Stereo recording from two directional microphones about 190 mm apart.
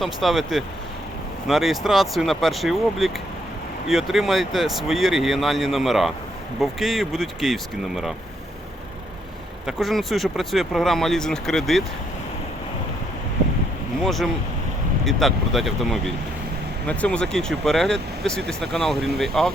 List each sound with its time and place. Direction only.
0.0 s speech: centre (ahead or behind)
9.6 s speech: centre (ahead or behind)
14.0 s speech: centre (ahead or behind)